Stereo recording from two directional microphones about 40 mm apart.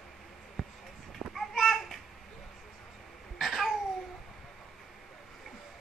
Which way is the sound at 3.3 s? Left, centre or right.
Centre.